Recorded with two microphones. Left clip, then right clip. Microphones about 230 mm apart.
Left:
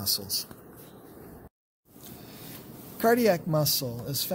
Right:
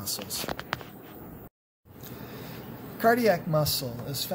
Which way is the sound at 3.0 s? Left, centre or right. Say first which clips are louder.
Even; left.